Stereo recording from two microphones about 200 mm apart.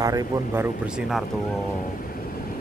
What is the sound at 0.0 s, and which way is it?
Speech, 15° right (ahead or behind).